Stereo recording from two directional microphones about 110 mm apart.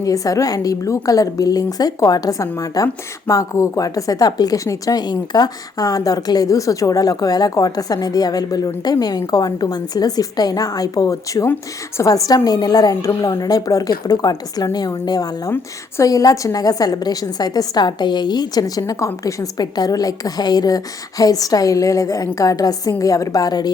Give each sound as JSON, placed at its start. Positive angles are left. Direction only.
{"t": 0.0, "sound": "a woman's voice", "side_deg": 30}